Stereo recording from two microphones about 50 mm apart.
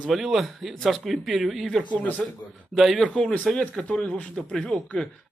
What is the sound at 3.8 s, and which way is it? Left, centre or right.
Speech, left.